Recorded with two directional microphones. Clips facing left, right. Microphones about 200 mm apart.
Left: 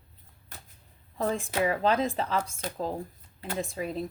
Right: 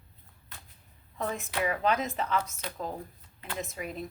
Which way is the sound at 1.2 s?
30° left (ahead or behind).